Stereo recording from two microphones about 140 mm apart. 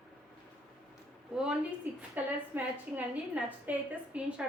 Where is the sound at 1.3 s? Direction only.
5° right (ahead or behind).